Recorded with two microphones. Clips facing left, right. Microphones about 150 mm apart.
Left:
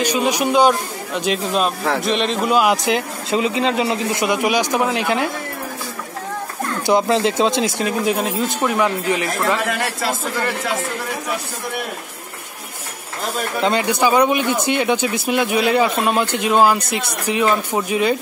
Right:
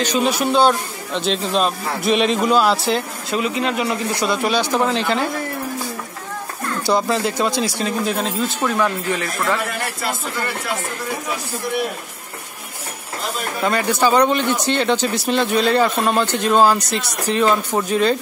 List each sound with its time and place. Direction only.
0.0 s speech: 10° left (ahead or behind)
2.0 s speech: 5° right (ahead or behind)
2.5 s speech: 15° left (ahead or behind)
3.3 s speech: 25° left (ahead or behind)
6.9 s speech: 20° left (ahead or behind)
13.6 s speech: 20° left (ahead or behind)